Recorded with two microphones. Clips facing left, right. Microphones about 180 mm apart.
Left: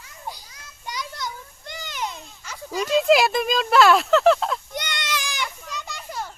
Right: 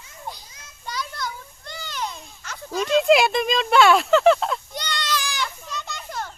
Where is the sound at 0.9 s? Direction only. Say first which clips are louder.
Right 1 dB; 15° left (ahead or behind); by 4.6 s centre (ahead or behind).